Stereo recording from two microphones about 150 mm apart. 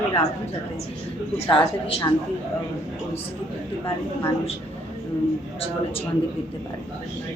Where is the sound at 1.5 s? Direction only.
35° left (ahead or behind).